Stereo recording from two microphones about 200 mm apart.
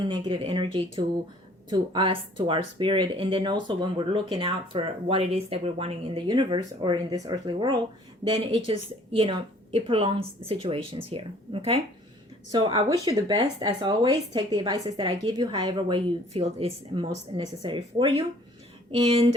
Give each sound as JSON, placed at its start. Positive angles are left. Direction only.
{"t": 0.1, "sound": "speech", "side_deg": -25}